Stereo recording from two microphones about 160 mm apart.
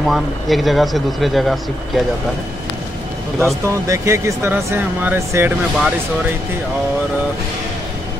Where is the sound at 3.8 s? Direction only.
20° right (ahead or behind).